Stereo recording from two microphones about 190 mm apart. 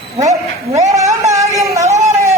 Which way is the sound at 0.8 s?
15° right (ahead or behind).